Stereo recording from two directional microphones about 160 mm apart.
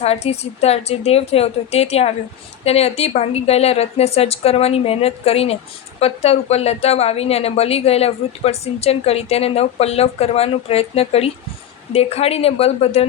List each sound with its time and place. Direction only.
0.0 s a woman's voice: 40° left (ahead or behind)